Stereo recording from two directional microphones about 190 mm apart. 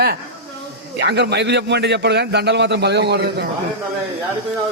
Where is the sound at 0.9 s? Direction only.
65° right (ahead or behind).